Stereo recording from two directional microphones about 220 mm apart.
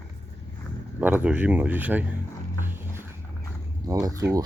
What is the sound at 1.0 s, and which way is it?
Speech, 5° right (ahead or behind).